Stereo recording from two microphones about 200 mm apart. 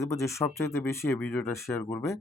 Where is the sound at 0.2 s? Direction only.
15° left (ahead or behind).